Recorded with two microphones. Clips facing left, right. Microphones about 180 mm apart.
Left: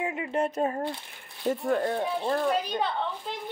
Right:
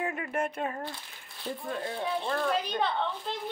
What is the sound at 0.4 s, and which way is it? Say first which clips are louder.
Speech: left 6 dB; 30° left (ahead or behind).